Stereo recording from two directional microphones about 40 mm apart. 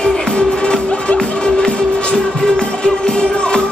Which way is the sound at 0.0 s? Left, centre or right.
Centre.